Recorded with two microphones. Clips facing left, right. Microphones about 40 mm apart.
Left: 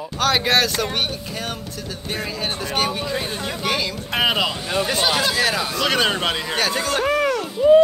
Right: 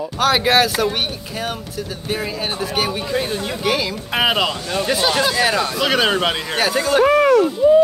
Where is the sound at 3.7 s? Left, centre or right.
Centre.